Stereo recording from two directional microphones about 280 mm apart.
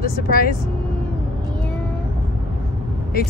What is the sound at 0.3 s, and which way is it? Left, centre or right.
Speech, left.